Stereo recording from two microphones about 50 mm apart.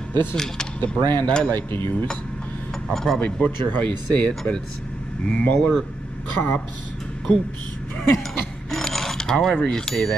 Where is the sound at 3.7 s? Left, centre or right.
Left.